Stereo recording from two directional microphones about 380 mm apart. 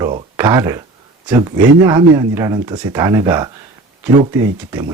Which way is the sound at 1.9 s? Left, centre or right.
Centre.